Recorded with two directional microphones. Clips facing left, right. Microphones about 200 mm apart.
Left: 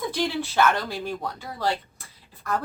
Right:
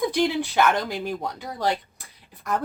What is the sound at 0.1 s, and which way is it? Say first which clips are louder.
A woman's voice: right 4 dB; 15° right (ahead or behind).